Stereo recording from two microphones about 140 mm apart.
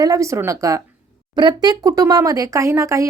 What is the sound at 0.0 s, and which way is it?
Speech, 25° right (ahead or behind).